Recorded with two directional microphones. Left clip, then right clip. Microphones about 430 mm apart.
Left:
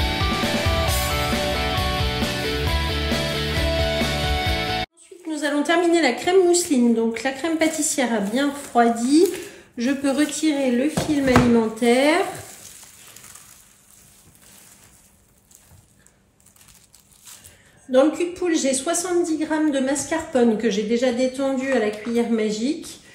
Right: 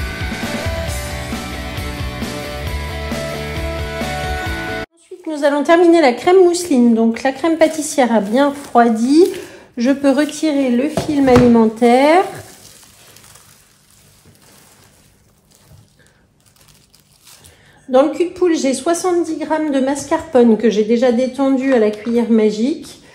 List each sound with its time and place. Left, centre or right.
0.0 s music: centre
5.3 s a woman's voice: centre
17.9 s a woman's voice: centre